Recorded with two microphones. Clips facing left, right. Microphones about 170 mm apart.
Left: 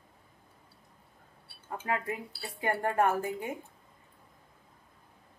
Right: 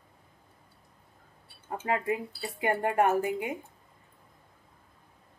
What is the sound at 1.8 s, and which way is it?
Speech, 20° right (ahead or behind).